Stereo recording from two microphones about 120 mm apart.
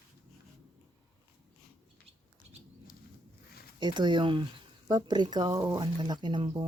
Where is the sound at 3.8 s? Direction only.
40° right (ahead or behind).